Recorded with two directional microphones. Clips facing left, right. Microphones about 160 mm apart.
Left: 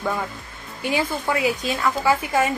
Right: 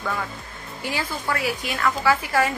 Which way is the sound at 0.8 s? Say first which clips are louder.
Left 4 dB; 20° left (ahead or behind).